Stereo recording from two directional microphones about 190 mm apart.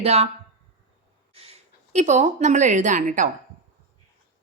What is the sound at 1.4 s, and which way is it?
A woman's voice, 35° right (ahead or behind).